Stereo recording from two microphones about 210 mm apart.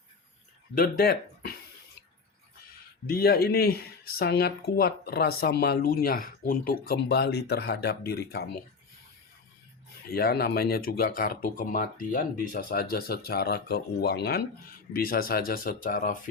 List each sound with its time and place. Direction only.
0.8 s speech: 45° left (ahead or behind)
3.1 s speech: 45° left (ahead or behind)
10.1 s speech: 45° left (ahead or behind)